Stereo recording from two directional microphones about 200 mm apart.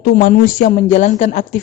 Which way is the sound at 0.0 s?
50° left (ahead or behind).